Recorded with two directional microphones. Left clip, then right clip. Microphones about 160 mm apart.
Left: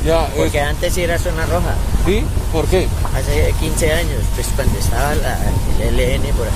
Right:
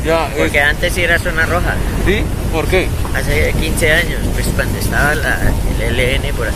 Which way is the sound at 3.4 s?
20° left (ahead or behind).